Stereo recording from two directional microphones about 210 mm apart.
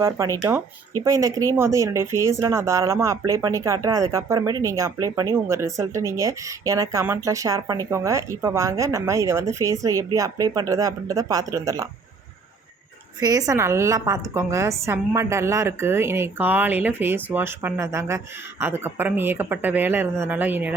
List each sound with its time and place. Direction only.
0.0 s speech: 15° right (ahead or behind)
13.1 s speech: 15° right (ahead or behind)